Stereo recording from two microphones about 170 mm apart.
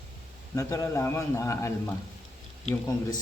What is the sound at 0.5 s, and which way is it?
A man's voice, 15° left (ahead or behind).